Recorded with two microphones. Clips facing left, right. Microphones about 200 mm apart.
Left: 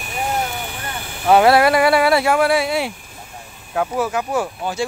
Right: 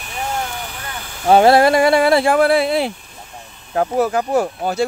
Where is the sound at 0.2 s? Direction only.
15° left (ahead or behind).